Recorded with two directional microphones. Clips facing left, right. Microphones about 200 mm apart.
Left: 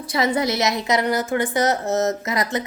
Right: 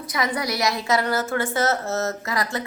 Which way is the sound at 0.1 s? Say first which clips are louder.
Left 5 dB; 25° left (ahead or behind).